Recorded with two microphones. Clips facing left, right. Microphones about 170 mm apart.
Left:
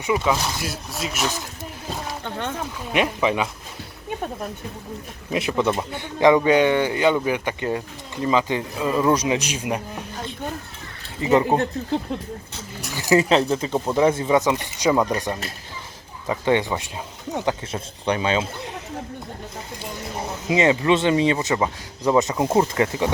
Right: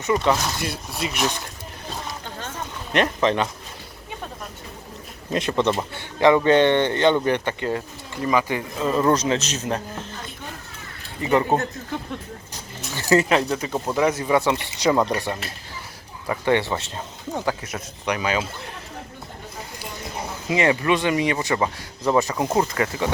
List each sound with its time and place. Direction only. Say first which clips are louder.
0.0 s speech: right 1 dB; 5° left (ahead or behind)
2.2 s a sound: left 6 dB; 60° left (ahead or behind)
2.9 s speech: right 1 dB; 10° left (ahead or behind)
5.3 s speech: even; 5° left (ahead or behind)
5.9 s speech: left 2 dB; 15° left (ahead or behind)
7.6 s speech: even; 20° left (ahead or behind)
8.8 s speech: even; 5° left (ahead or behind)
11.2 s speech: left 2 dB; 20° left (ahead or behind)
12.9 s speech: even; 15° left (ahead or behind)
13.2 s speech: left 2 dB; 25° left (ahead or behind); by 15.1 s 10° left (ahead or behind)
16.3 s speech: left 1 dB; 15° left (ahead or behind)
17.3 s speech: left 2 dB; 25° left (ahead or behind)
20.5 s speech: left 2 dB; 20° left (ahead or behind)